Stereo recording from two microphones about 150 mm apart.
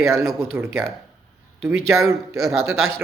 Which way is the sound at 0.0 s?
20° right (ahead or behind).